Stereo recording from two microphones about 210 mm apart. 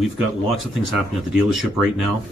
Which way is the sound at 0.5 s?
Centre (ahead or behind).